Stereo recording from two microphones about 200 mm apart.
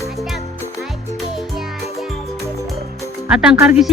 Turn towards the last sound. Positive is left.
turn(degrees=-5)  # may be behind; listen again after turning